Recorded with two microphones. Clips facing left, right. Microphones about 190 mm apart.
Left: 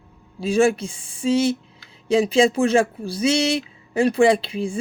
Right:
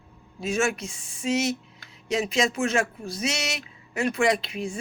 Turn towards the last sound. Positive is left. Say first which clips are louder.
# left 6 dB
turn(degrees=30)  # may be behind; listen again after turning